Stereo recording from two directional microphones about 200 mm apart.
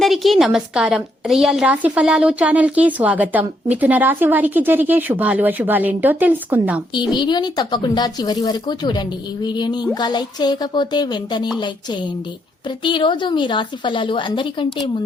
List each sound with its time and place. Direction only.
0.0 s a woman's voice: centre (ahead or behind)
7.1 s speech: 20° left (ahead or behind)
12.6 s speech: 25° left (ahead or behind)